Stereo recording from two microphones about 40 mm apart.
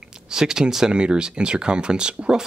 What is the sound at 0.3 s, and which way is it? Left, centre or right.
Speech, centre.